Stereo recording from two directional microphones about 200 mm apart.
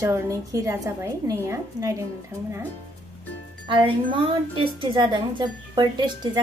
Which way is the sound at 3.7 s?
25° right (ahead or behind).